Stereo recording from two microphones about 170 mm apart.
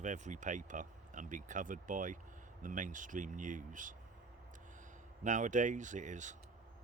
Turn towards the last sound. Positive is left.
turn(degrees=-45)  # may be behind; listen again after turning